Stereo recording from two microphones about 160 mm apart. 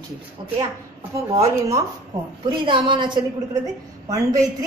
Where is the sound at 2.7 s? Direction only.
30° right (ahead or behind).